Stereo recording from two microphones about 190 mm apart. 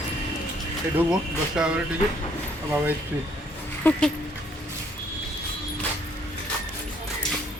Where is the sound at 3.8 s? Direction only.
5° left (ahead or behind).